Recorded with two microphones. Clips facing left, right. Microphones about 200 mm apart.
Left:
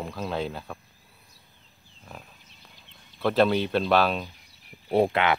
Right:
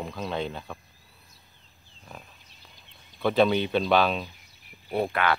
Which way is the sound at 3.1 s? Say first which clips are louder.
Even; centre (ahead or behind).